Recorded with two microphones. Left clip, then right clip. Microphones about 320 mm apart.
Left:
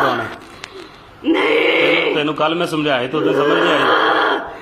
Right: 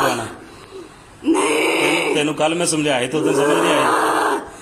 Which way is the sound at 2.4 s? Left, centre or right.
Right.